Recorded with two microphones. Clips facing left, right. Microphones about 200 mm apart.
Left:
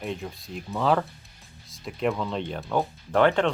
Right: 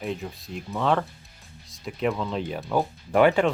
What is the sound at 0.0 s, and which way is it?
Speech, centre (ahead or behind).